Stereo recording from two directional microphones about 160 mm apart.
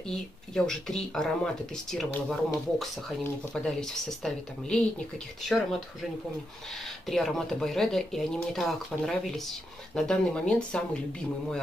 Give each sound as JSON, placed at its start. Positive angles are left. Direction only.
{"t": 0.1, "sound": "speech", "side_deg": 5}
{"t": 3.5, "sound": "speech", "side_deg": 5}
{"t": 7.1, "sound": "speech", "side_deg": 0}